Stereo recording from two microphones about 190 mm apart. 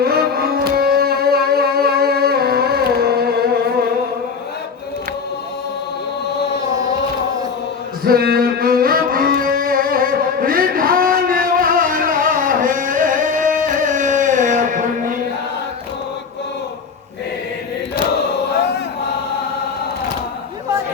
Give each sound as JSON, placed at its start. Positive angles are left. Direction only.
{"t": 0.0, "sound": "music", "side_deg": -55}
{"t": 8.0, "sound": "music", "side_deg": -55}